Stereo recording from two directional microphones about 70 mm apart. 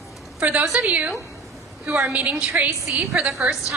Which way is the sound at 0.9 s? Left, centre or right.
Right.